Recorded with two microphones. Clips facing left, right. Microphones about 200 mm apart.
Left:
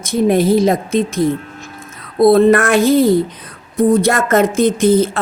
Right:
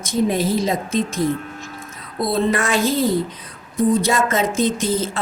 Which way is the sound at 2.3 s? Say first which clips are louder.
Left 8 dB; 60° left (ahead or behind).